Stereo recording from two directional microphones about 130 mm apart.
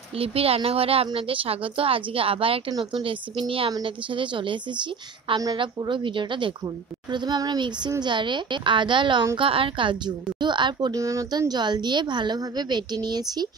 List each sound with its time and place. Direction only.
0.1 s a woman's voice: 50° right (ahead or behind); by 13.5 s 30° right (ahead or behind)